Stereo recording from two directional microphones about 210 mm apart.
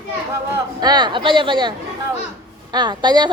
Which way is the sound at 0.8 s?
20° right (ahead or behind).